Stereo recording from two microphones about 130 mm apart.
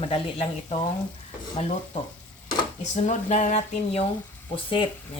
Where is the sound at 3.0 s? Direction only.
65° left (ahead or behind).